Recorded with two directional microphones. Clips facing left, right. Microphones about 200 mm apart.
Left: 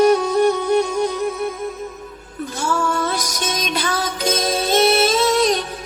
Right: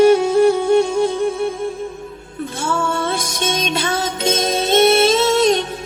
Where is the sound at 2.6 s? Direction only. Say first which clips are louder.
Even; 25° right (ahead or behind).